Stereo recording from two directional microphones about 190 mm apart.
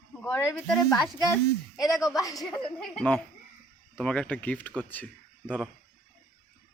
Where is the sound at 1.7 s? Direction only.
20° left (ahead or behind).